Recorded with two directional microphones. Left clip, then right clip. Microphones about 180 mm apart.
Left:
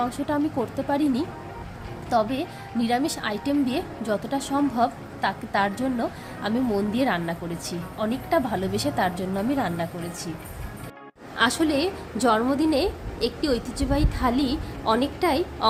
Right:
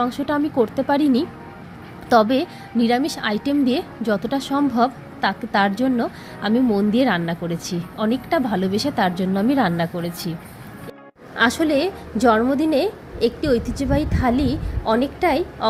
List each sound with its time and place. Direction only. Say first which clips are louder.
0.0 s a woman's voice: right 4 dB; 25° right (ahead or behind)
2.7 s a woman's voice: right 5 dB; 20° right (ahead or behind)
11.3 s a woman's voice: right 4 dB; 20° right (ahead or behind)